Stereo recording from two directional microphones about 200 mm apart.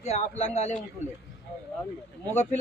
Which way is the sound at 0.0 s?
35° left (ahead or behind).